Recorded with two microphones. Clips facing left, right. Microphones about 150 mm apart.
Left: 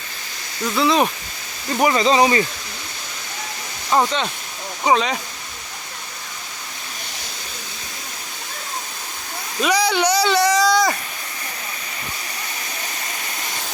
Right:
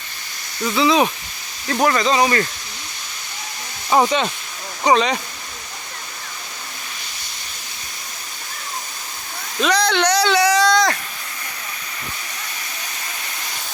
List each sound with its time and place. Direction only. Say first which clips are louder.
0.6 s speech: right 1 dB; centre (ahead or behind)
2.0 s speech: left 2 dB; 25° left (ahead or behind)
3.8 s speech: right 2 dB; 10° right (ahead or behind)
4.8 s speech: right 2 dB; 5° left (ahead or behind)
9.6 s a sound: even; 10° left (ahead or behind)